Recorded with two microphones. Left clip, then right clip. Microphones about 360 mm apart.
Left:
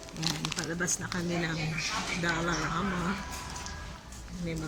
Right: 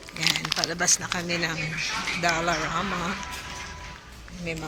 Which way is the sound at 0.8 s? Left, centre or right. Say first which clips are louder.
Right 9 dB; centre.